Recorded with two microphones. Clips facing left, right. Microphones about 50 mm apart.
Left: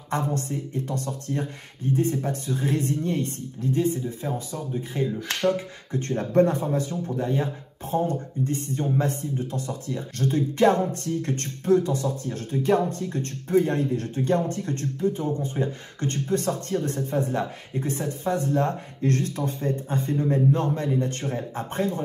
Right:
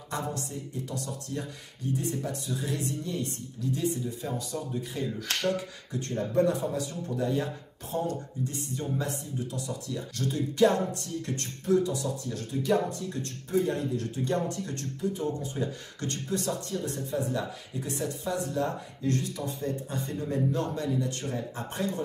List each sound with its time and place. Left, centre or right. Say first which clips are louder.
0.1 s speech: left 7 dB; left
5.9 s speech: left 5 dB; left